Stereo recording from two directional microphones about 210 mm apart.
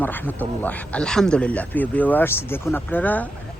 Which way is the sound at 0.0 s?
10° left (ahead or behind).